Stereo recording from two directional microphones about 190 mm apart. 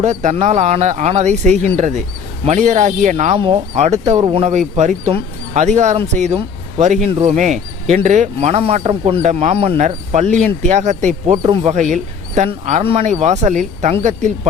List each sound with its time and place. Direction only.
0.0 s speech: 40° right (ahead or behind)